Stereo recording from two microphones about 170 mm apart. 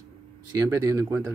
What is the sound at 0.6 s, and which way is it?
Speech, 15° right (ahead or behind).